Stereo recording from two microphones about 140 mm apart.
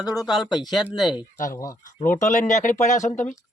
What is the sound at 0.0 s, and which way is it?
Speech, 25° left (ahead or behind).